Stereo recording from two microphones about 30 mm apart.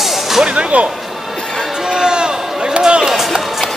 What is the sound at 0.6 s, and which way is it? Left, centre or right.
Speech, right.